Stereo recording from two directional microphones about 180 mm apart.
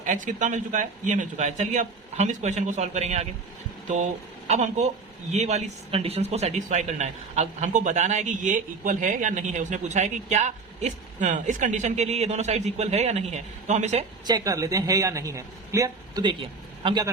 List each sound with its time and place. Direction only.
0.0 s a man's voice: 45° right (ahead or behind)
14.3 s speech: 20° right (ahead or behind)